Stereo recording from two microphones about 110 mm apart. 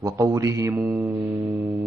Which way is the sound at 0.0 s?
30° right (ahead or behind).